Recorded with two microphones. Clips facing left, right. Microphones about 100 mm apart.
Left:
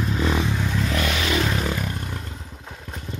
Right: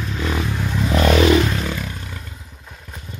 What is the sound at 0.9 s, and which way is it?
Vehicle, 35° right (ahead or behind).